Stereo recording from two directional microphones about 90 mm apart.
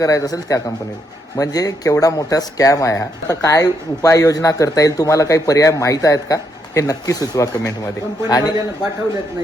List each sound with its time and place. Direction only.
0.0 s a man's voice: 40° left (ahead or behind)